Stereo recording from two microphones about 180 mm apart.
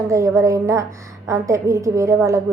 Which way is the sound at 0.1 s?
15° right (ahead or behind).